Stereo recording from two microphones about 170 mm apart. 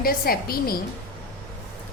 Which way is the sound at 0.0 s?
60° left (ahead or behind).